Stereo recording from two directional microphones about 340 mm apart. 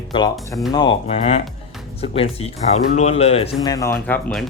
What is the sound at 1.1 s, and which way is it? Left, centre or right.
Speech, centre.